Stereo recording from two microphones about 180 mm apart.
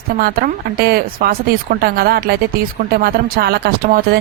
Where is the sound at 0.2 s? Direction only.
55° right (ahead or behind).